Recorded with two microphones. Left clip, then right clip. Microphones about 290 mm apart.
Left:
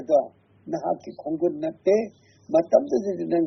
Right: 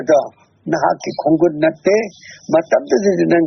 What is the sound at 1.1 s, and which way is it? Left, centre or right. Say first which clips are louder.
Speech: right 12 dB; right.